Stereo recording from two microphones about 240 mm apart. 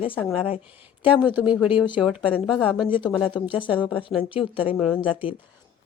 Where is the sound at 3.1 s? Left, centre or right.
Centre.